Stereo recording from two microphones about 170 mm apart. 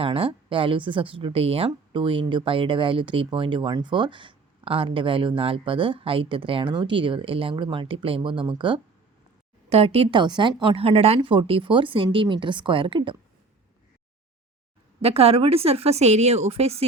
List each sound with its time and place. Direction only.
0.0 s a woman's voice: 35° right (ahead or behind)
15.0 s a woman's voice: 35° right (ahead or behind)